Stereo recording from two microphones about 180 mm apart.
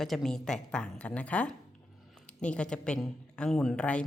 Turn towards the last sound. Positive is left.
turn(degrees=5)  # may be behind; listen again after turning